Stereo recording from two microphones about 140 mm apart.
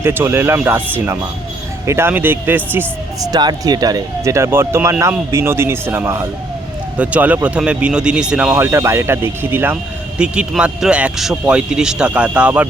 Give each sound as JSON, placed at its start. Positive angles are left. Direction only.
{"t": 0.0, "sound": "speech", "side_deg": -15}
{"t": 3.2, "sound": "speech", "side_deg": -25}
{"t": 8.5, "sound": "speech", "side_deg": -20}